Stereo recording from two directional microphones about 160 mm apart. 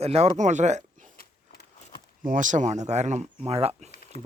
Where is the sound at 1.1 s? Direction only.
85° left.